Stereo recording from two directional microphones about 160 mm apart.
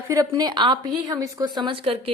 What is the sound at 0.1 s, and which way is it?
A woman's voice, 20° right (ahead or behind).